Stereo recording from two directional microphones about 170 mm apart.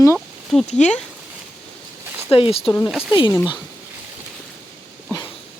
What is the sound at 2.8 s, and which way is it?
Speech, centre (ahead or behind).